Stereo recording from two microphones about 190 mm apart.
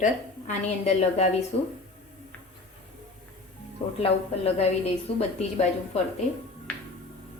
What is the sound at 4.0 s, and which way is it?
A woman's voice, 30° left (ahead or behind).